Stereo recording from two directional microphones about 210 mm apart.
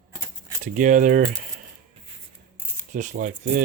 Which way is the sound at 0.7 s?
35° right (ahead or behind).